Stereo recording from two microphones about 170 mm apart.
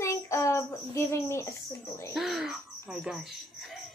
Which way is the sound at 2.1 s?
Centre (ahead or behind).